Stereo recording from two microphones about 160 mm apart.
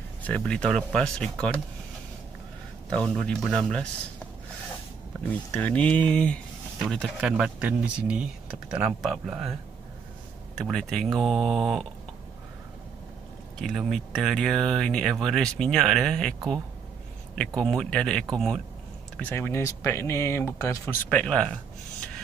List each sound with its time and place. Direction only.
0.2 s speech: 5° left (ahead or behind)
2.9 s speech: 5° left (ahead or behind)
5.5 s speech: 10° left (ahead or behind)
10.6 s speech: 5° left (ahead or behind)
13.6 s speech: centre (ahead or behind)
17.4 s speech: 5° left (ahead or behind)
19.1 s speech: 10° left (ahead or behind)
21.1 s speech: 5° left (ahead or behind)